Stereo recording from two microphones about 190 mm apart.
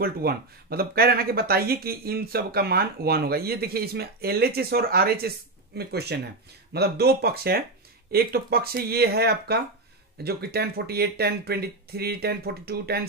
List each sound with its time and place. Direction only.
0.0 s speech: 55° right (ahead or behind)